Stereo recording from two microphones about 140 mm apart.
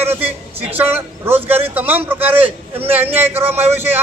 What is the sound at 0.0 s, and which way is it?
A man's voice, 15° right (ahead or behind).